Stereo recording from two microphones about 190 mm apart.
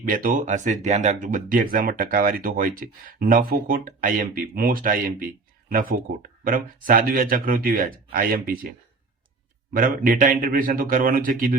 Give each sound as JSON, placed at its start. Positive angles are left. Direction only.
{"t": 0.0, "sound": "speech", "side_deg": -45}
{"t": 9.7, "sound": "speech", "side_deg": -45}